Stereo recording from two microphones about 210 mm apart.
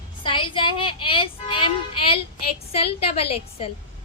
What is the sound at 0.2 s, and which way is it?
Speech, 25° left (ahead or behind).